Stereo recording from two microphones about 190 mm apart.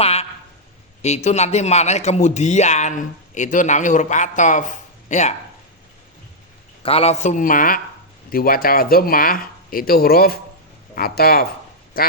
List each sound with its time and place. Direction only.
0.0 s a sound: 30° left (ahead or behind)
1.0 s speech: 35° left (ahead or behind)
6.8 s speech: 30° left (ahead or behind); by 12.1 s 50° left (ahead or behind)